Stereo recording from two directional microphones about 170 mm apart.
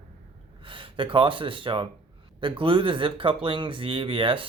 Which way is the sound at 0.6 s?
30° right (ahead or behind).